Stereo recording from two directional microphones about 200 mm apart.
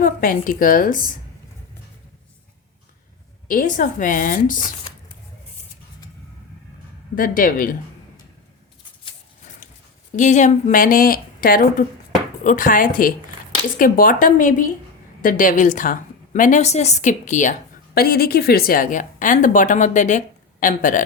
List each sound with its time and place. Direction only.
0.0 s speech: 45° left (ahead or behind)
3.5 s a woman's voice: 40° left (ahead or behind)
7.2 s speech: 45° left (ahead or behind)
10.2 s a woman's voice: 35° left (ahead or behind)
17.9 s a woman's voice: 50° left (ahead or behind)